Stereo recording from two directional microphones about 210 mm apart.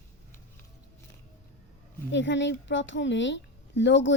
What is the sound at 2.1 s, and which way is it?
A woman's voice, 60° left (ahead or behind).